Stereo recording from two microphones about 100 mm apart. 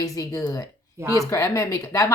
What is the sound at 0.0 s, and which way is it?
Speech, 35° left (ahead or behind).